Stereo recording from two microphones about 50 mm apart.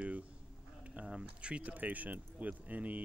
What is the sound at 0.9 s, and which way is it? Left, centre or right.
Speech, centre.